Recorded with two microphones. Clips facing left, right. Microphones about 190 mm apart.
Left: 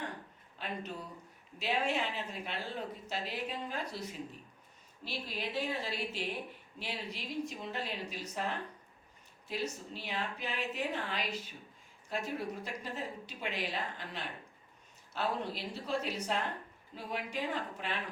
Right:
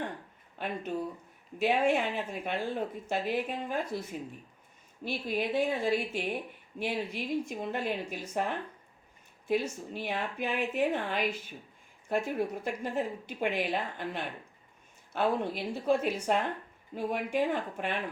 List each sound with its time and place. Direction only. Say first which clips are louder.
0.6 s speech: right 7 dB; 50° right (ahead or behind)